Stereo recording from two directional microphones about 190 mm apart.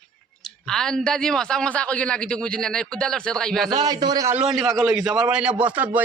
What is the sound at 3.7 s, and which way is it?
Speech, 20° right (ahead or behind).